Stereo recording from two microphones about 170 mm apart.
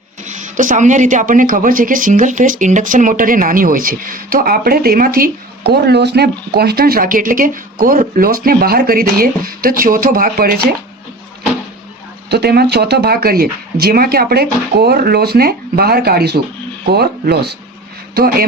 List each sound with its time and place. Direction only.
0.3 s speech: 45° right (ahead or behind)
12.3 s speech: 70° right (ahead or behind)